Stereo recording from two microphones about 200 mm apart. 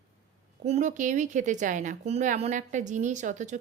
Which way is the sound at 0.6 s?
35° right (ahead or behind).